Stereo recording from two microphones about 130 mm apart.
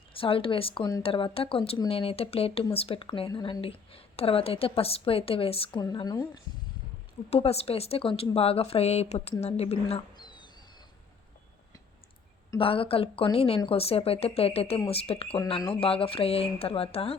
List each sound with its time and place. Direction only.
0.2 s speech: 45° left (ahead or behind)
3.2 s speech: 35° left (ahead or behind)
5.8 s a woman's voice: 30° left (ahead or behind)
7.3 s speech: 50° left (ahead or behind)
12.5 s speech: 45° left (ahead or behind)